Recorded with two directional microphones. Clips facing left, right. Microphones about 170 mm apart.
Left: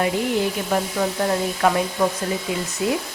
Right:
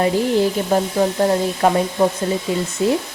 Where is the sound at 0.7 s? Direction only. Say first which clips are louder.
Right 5 dB; 30° right (ahead or behind).